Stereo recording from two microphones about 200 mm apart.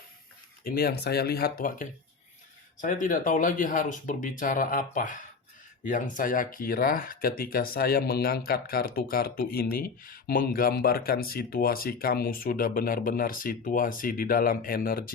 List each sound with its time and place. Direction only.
0.6 s speech: 50° left (ahead or behind)